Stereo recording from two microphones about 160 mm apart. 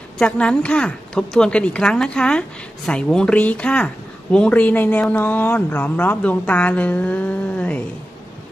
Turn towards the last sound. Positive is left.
turn(degrees=10)  # may be behind; listen again after turning